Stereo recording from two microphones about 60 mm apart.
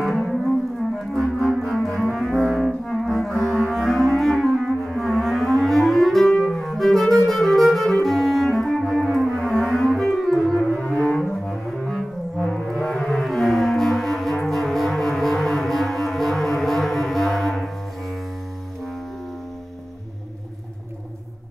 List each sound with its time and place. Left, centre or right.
0.9 s clarinet: centre
2.9 s music: centre
10.8 s cello: centre
11.4 s brass instrument: centre
12.9 s music: centre